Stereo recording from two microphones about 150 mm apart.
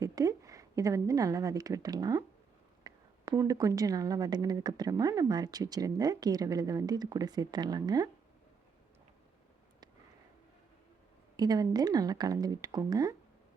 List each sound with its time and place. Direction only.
0.0 s a woman's voice: 25° right (ahead or behind)
11.3 s speech: 25° right (ahead or behind)